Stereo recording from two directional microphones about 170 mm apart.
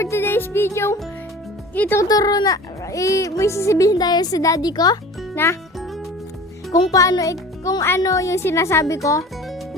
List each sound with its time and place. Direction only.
0.0 s a woman's voice: 15° left (ahead or behind)
6.9 s speech: 20° left (ahead or behind)